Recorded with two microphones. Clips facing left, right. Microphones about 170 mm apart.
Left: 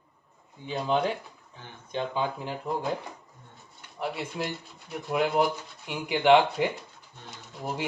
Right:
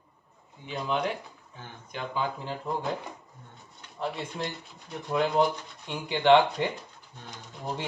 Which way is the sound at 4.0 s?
5° left (ahead or behind).